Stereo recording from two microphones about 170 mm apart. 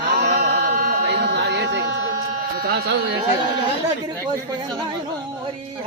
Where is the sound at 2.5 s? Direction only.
70° right (ahead or behind).